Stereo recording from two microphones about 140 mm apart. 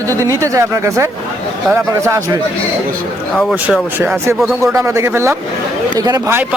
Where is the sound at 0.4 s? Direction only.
20° right (ahead or behind).